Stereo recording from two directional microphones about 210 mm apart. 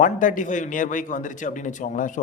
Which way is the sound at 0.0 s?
40° left (ahead or behind).